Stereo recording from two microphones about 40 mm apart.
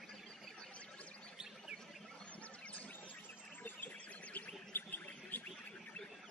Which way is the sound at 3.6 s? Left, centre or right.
Left.